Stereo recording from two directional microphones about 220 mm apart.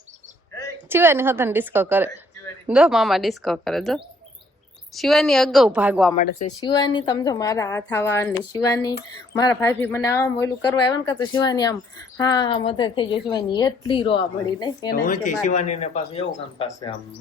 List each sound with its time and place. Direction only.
0.9 s a woman's voice: 10° right (ahead or behind)
6.6 s a woman's voice: 15° left (ahead or behind)
15.0 s a woman's voice: 35° left (ahead or behind)